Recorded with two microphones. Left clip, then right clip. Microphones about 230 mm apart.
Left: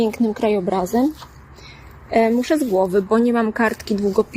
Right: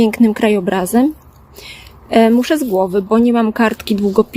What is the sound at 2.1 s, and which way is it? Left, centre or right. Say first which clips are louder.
A woman's voice: right 5 dB; right.